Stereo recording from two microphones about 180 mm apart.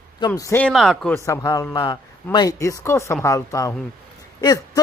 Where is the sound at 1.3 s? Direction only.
15° left (ahead or behind).